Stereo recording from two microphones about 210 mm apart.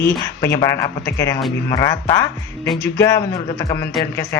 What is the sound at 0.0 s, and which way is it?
Speech, 10° left (ahead or behind).